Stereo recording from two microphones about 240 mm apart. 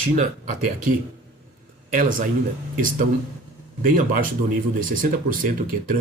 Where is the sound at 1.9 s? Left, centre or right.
Right.